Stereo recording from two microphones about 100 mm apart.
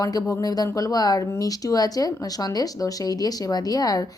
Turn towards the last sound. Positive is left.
turn(degrees=40)  # may be behind; listen again after turning